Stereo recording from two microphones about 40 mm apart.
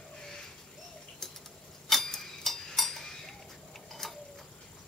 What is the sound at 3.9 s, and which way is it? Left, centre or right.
Tick-tock, centre.